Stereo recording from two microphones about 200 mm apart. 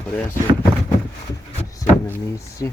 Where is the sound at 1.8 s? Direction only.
15° left (ahead or behind).